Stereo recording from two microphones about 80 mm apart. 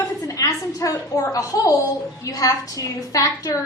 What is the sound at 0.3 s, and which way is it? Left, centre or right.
A woman's voice, left.